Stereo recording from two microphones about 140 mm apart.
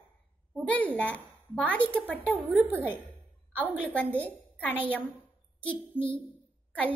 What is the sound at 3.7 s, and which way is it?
A child's voice, 10° left (ahead or behind).